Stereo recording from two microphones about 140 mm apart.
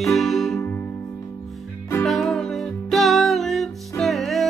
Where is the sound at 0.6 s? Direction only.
15° left (ahead or behind).